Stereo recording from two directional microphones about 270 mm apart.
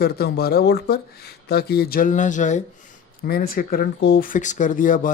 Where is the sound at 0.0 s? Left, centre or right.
Left.